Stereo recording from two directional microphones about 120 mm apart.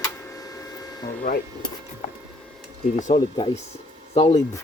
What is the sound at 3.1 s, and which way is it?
Speech, 40° left (ahead or behind).